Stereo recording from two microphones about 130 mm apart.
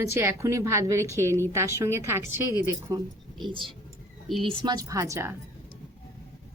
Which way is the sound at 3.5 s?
40° right (ahead or behind).